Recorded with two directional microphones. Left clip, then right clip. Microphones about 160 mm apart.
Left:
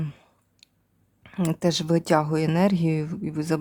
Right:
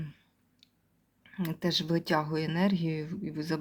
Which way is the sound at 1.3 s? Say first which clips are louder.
Left 8 dB; 60° left (ahead or behind).